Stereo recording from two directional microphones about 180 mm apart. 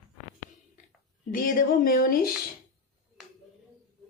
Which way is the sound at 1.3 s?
50° left (ahead or behind).